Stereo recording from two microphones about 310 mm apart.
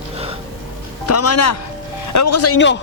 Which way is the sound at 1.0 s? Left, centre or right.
Left.